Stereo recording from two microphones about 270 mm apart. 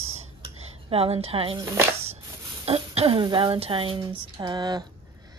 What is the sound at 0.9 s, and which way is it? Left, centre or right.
Speech, right.